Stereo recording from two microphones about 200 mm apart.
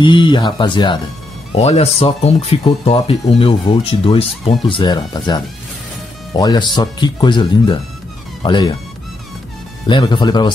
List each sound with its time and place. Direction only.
0.0 s speech: 25° left (ahead or behind)
9.8 s speech: 20° left (ahead or behind)